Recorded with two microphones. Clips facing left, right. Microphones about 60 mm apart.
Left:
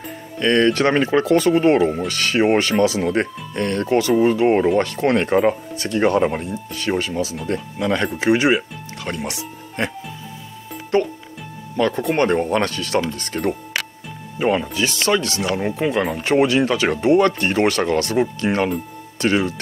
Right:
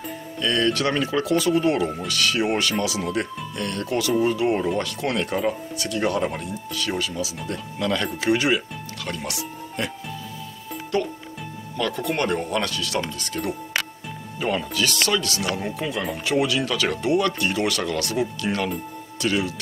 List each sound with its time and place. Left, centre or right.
0.4 s speech: left
7.8 s speech: left
14.4 s speech: left